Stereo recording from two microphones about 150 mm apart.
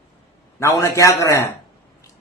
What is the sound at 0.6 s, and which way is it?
Speech, 20° left (ahead or behind).